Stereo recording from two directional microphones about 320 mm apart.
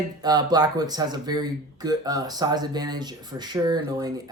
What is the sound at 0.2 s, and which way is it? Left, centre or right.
Speech, centre.